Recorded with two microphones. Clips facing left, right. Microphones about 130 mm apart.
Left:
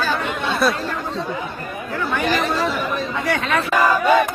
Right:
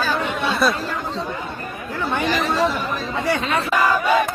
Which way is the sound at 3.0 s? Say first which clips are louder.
Even; 30° right (ahead or behind).